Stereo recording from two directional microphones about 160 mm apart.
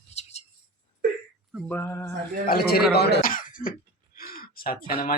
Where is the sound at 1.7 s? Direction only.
15° left (ahead or behind).